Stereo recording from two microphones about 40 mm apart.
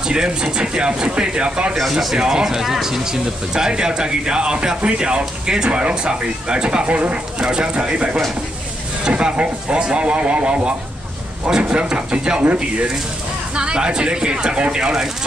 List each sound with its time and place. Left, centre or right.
0.1 s speech: right
1.9 s speech: centre
2.1 s speech: centre